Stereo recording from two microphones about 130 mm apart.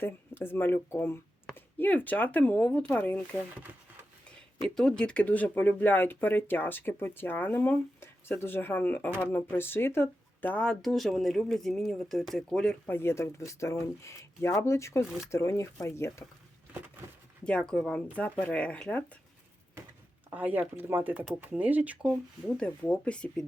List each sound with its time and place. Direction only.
0.0 s speech: 15° left (ahead or behind)
4.7 s speech: 5° left (ahead or behind)
12.9 s speech: 20° left (ahead or behind)
17.4 s speech: 10° left (ahead or behind)
20.3 s speech: 15° right (ahead or behind)
22.4 s speech: 5° left (ahead or behind)